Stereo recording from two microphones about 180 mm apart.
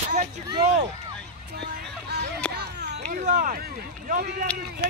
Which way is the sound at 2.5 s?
65° right (ahead or behind).